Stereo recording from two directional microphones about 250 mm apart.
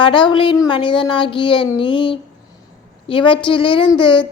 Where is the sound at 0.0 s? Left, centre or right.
Centre.